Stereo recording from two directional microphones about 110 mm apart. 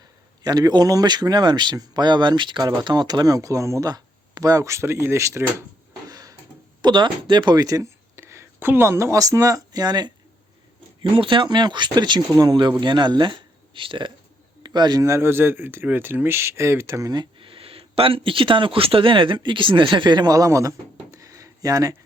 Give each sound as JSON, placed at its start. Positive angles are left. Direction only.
{"t": 0.4, "sound": "speech", "side_deg": -35}
{"t": 6.1, "sound": "a sound", "side_deg": -35}
{"t": 6.8, "sound": "speech", "side_deg": -45}
{"t": 11.0, "sound": "speech", "side_deg": -50}
{"t": 14.6, "sound": "a sound", "side_deg": -40}
{"t": 15.0, "sound": "speech", "side_deg": -25}
{"t": 17.4, "sound": "speech", "side_deg": -55}